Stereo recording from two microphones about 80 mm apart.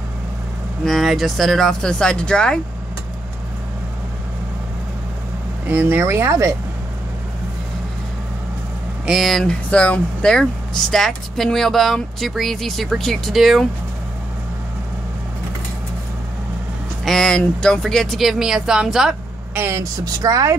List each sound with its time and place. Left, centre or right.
0.8 s speech: centre
5.7 s speech: right
9.0 s speech: centre
9.4 s speech: centre
17.0 s speech: centre
19.5 s speech: right
20.2 s speech: right